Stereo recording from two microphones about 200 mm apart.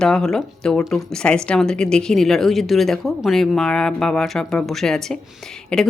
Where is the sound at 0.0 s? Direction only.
5° left (ahead or behind).